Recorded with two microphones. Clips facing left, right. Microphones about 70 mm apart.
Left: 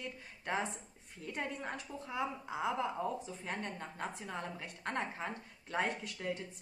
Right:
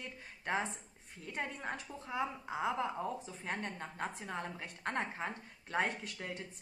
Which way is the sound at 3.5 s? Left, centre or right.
Centre.